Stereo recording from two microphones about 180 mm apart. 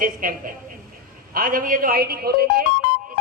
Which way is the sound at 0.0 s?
50° right (ahead or behind).